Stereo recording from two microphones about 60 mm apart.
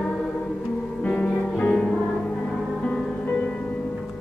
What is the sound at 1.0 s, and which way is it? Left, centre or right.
Music, centre.